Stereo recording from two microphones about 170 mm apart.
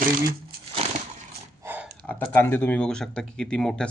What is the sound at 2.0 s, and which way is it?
Speech, 10° left (ahead or behind).